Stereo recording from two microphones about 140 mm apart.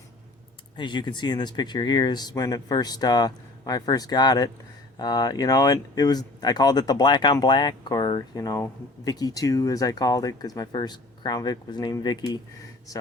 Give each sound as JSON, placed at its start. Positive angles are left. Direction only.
{"t": 0.8, "sound": "speech", "side_deg": 30}